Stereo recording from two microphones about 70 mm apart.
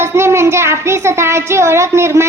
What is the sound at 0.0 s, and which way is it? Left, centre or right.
A woman's voice, right.